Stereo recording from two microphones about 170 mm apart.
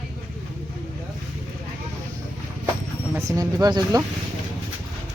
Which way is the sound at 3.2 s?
20° right (ahead or behind).